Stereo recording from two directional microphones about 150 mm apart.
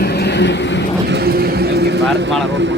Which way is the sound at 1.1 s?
90° right.